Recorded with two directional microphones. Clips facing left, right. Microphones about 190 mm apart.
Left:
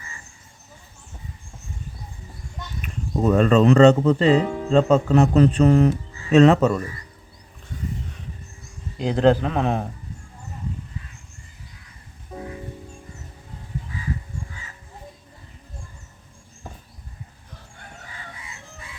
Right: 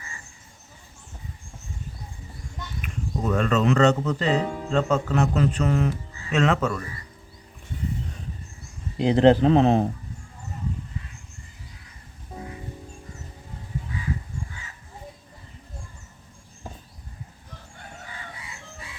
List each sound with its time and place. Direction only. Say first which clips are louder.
3.2 s speech: left 7 dB; 35° left (ahead or behind)
9.0 s speech: right 1 dB; 25° right (ahead or behind)